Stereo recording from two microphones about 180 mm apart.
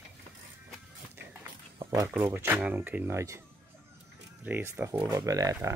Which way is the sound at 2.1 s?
10° right (ahead or behind).